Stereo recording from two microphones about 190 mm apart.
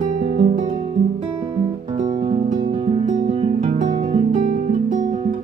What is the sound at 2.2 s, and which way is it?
Music, 35° right (ahead or behind).